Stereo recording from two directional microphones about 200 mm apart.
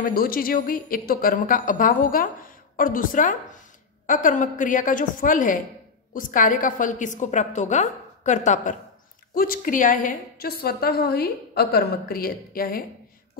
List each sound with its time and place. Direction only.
0.0 s a woman's voice: 45° left (ahead or behind)